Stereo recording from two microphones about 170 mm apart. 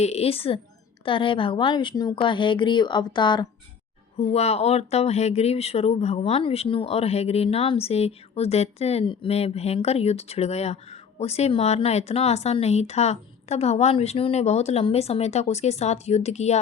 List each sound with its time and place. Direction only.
0.0 s speech: 40° left (ahead or behind)
4.2 s speech: 40° left (ahead or behind)